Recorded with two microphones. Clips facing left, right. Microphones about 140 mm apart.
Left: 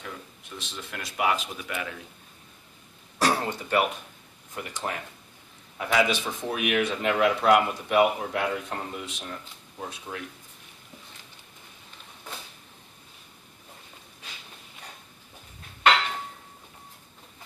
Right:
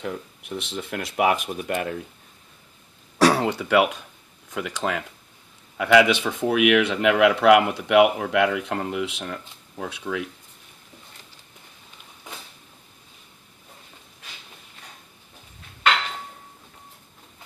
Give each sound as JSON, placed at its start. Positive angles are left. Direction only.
{"t": 0.0, "sound": "speech", "side_deg": -65}
{"t": 3.2, "sound": "speech", "side_deg": -75}